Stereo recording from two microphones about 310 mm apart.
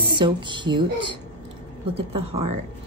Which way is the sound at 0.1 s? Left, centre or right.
Centre.